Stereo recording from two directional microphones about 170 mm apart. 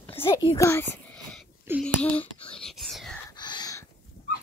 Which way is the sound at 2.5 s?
Centre (ahead or behind).